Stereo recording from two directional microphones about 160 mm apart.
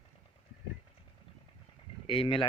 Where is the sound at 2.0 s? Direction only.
35° left (ahead or behind).